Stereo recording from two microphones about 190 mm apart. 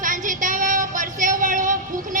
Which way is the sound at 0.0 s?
45° right (ahead or behind).